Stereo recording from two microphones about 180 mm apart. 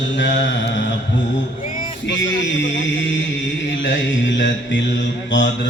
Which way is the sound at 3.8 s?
90° left.